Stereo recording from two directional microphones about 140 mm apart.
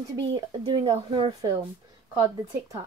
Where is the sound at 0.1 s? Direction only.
30° right (ahead or behind).